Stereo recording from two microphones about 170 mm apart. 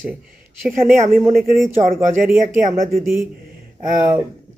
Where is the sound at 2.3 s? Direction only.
60° right (ahead or behind).